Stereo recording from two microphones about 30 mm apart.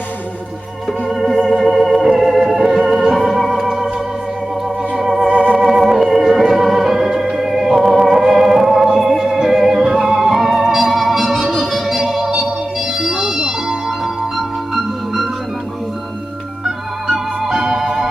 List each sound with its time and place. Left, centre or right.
0.9 s organ: centre
9.4 s music: centre
10.9 s organ: centre
12.0 s music: centre
12.5 s organ: centre
14.3 s music: centre
17.5 s organ: centre